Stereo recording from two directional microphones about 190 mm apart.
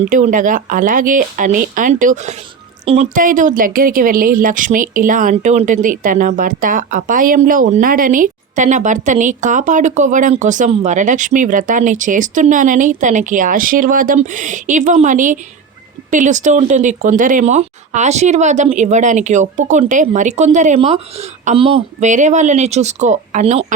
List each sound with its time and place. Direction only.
0.1 s speech: 45° right (ahead or behind)